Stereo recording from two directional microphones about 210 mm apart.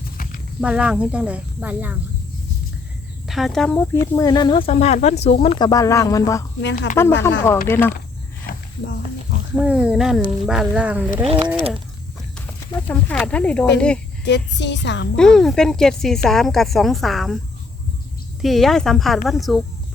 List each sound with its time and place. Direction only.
0.6 s speech: 5° right (ahead or behind)
3.2 s speech: centre (ahead or behind)
4.0 s speech: 15° left (ahead or behind)
8.4 s snake: 55° left (ahead or behind)
9.6 s speech: 5° right (ahead or behind)
11.2 s speech: 25° right (ahead or behind)
12.9 s speech: 5° left (ahead or behind)
14.3 s a woman's voice: 55° left (ahead or behind)
15.1 s speech: 5° left (ahead or behind)
18.4 s speech: centre (ahead or behind)